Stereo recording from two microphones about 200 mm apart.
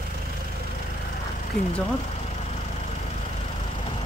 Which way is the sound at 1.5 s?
5° left (ahead or behind).